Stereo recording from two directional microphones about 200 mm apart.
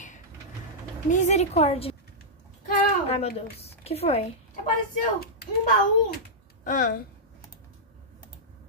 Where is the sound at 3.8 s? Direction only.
30° left (ahead or behind).